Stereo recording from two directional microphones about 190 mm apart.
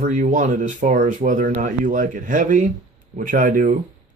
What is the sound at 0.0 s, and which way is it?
Speech, 40° right (ahead or behind).